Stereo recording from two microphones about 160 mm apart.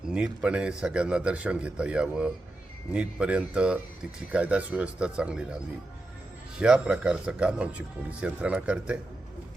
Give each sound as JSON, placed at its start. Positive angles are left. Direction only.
{"t": 0.1, "sound": "speech", "side_deg": -5}
{"t": 6.6, "sound": "speech", "side_deg": -5}